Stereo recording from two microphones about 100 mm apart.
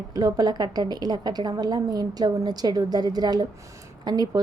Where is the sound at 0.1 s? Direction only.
40° right (ahead or behind).